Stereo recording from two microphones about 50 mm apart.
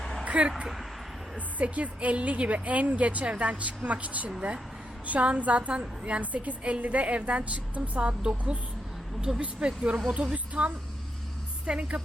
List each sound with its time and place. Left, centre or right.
0.0 s a sound: centre
0.3 s speech: right
1.5 s a woman's voice: right
10.3 s a woman's voice: right